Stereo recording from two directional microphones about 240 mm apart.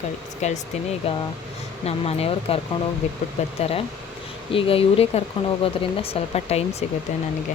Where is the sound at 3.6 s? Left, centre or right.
Left.